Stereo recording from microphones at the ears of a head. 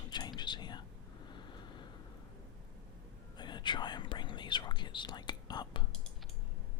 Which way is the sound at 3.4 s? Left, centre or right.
Left.